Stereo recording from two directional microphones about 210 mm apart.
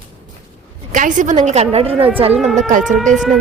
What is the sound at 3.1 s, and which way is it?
Speech, centre (ahead or behind).